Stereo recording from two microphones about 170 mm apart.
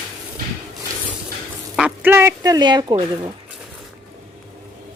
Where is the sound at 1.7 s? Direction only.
10° right (ahead or behind); by 2.8 s 25° right (ahead or behind).